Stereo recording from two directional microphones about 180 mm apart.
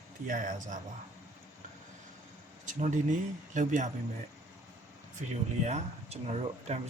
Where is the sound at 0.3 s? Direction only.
45° right (ahead or behind).